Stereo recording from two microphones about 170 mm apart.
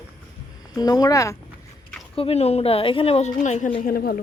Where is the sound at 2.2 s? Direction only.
35° left (ahead or behind); by 4.2 s 60° left (ahead or behind).